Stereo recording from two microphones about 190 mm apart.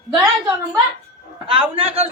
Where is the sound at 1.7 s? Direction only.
30° right (ahead or behind).